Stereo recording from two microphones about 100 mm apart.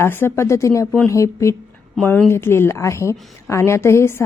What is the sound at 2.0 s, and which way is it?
A woman's voice, 15° left (ahead or behind).